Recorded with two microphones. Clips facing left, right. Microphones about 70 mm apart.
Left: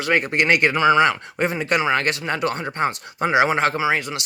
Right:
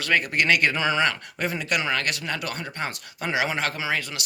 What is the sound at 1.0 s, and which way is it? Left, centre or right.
Speech, left.